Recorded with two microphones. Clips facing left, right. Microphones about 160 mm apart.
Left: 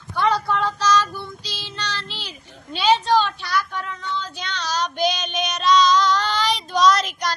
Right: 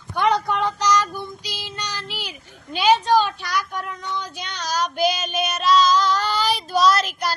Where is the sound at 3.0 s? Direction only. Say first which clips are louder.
Right 1 dB; 10° right (ahead or behind).